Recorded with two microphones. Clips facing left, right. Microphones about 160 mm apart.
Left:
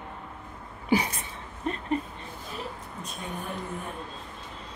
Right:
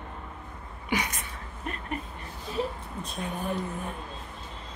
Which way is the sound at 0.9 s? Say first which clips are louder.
Left 5 dB; 30° left (ahead or behind).